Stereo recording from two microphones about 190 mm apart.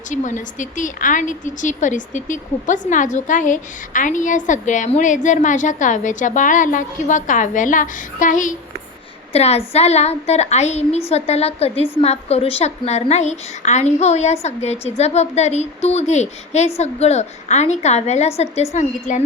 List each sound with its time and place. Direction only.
0.1 s a woman's voice: 40° left (ahead or behind)